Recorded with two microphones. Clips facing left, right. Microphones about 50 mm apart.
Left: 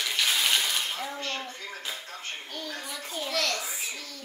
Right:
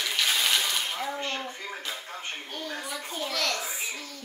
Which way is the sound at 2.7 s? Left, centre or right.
Centre.